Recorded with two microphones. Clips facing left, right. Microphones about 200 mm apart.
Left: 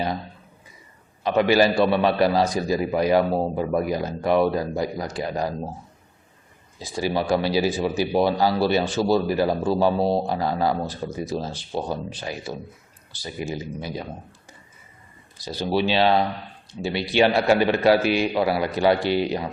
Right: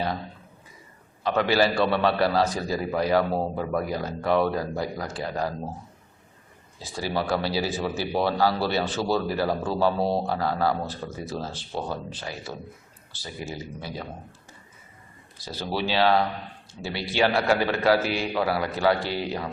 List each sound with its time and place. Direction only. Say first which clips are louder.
1.2 s speech: left 4 dB; 15° left (ahead or behind)
6.7 s speech: left 4 dB; 15° left (ahead or behind)
15.4 s speech: left 6 dB; 15° left (ahead or behind)